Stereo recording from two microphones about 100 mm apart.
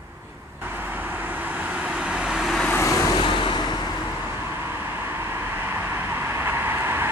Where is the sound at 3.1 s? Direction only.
55° left (ahead or behind).